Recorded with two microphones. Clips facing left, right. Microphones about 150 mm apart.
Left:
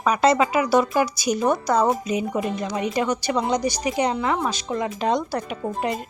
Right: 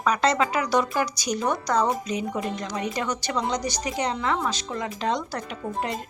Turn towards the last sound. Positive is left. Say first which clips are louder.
# left 4 dB
turn(degrees=10)  # may be behind; listen again after turning